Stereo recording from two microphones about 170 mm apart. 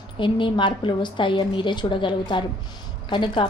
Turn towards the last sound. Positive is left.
turn(degrees=30)  # may be behind; listen again after turning